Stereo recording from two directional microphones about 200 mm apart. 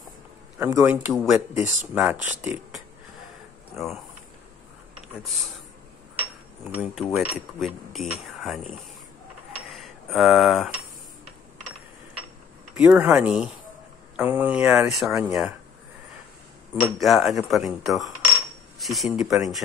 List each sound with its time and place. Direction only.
0.6 s speech: 10° right (ahead or behind)
1.1 s speech: centre (ahead or behind)
3.7 s speech: centre (ahead or behind)
5.0 s speech: centre (ahead or behind)
6.7 s speech: centre (ahead or behind)
9.7 s a sound: centre (ahead or behind)
12.7 s speech: 10° right (ahead or behind)
16.8 s speech: centre (ahead or behind)